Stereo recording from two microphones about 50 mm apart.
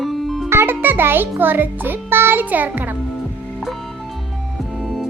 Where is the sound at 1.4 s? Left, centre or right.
Right.